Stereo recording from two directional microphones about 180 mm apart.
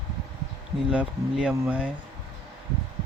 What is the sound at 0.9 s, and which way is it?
Speech, 5° right (ahead or behind).